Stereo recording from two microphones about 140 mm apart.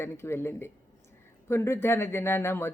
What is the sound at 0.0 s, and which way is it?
Speech, 15° left (ahead or behind).